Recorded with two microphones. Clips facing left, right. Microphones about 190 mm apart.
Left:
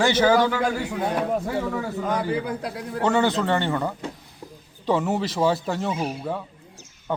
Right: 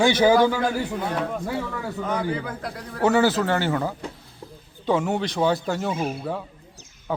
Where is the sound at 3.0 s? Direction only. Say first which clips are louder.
Right 2 dB; 5° right (ahead or behind).